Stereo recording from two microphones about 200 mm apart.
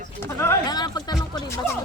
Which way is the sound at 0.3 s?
15° left (ahead or behind).